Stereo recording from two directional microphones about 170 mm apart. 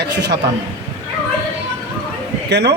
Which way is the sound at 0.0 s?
80° right.